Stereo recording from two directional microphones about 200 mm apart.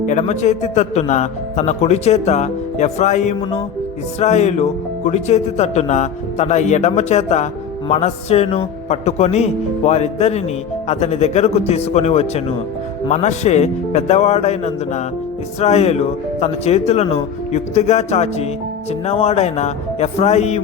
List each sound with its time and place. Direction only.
0.1 s speech: 35° left (ahead or behind)